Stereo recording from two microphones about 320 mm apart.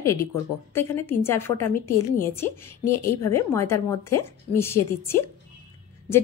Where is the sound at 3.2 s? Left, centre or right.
Left.